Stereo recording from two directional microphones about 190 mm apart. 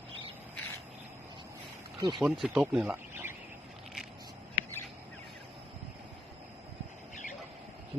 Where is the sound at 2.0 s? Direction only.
25° right (ahead or behind).